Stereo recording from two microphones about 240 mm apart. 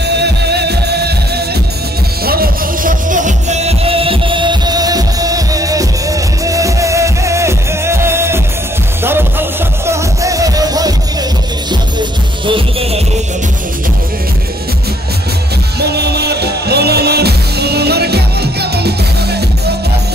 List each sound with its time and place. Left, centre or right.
0.0 s music: right
15.8 s music: right